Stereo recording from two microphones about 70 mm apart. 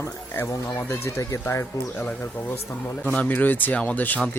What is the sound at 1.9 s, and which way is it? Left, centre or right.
Speech, left.